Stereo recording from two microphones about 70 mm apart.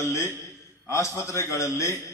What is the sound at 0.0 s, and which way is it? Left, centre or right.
A man's voice, left.